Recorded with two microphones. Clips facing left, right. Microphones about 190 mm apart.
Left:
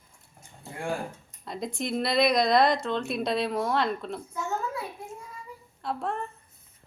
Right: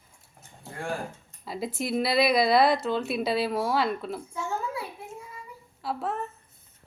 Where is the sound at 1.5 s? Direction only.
5° right (ahead or behind).